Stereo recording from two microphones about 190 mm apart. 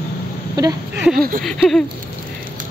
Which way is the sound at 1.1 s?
50° right (ahead or behind).